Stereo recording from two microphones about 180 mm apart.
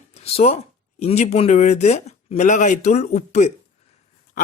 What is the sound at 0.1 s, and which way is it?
A man's voice, 35° left (ahead or behind).